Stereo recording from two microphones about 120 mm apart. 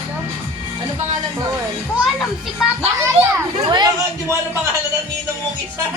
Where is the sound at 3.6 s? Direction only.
35° right (ahead or behind).